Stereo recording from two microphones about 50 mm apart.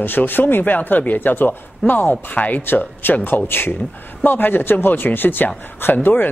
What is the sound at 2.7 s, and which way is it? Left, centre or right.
Speech, left.